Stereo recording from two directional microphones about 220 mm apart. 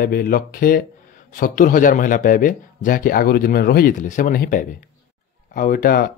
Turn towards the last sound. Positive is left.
turn(degrees=40)  # may be behind; listen again after turning